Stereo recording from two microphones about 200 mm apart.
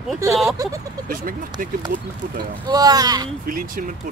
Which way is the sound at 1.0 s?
45° right (ahead or behind).